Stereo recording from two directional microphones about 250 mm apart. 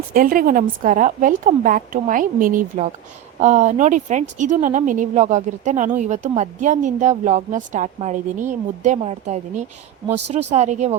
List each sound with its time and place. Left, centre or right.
0.1 s a woman's voice: right